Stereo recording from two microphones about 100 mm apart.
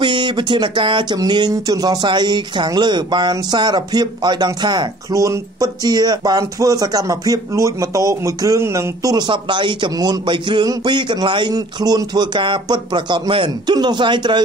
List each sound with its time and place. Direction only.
0.0 s speech: 50° right (ahead or behind); by 9.1 s 30° right (ahead or behind)
9.1 s speech: 50° right (ahead or behind)
11.5 s speech: 40° right (ahead or behind)